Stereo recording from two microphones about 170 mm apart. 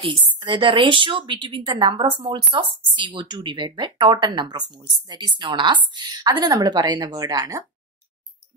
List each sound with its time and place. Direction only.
0.0 s a woman's voice: 30° right (ahead or behind)